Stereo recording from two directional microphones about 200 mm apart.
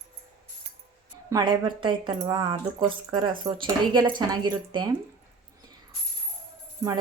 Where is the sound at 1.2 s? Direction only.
20° right (ahead or behind).